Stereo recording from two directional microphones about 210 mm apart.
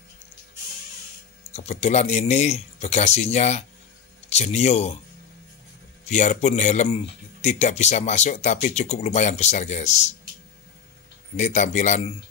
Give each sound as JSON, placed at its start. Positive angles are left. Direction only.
{"t": 1.5, "sound": "speech", "side_deg": 30}
{"t": 6.0, "sound": "speech", "side_deg": 35}
{"t": 11.3, "sound": "speech", "side_deg": 35}